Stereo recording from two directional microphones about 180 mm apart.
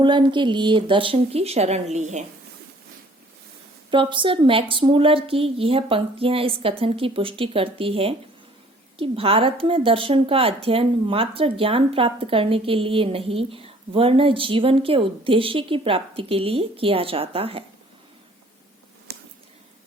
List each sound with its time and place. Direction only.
0.0 s a woman's voice: 25° right (ahead or behind)
3.9 s speech: 30° right (ahead or behind)
19.1 s a sound: 70° right (ahead or behind)